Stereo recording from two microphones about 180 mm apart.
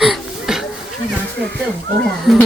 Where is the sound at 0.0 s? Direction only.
Centre (ahead or behind).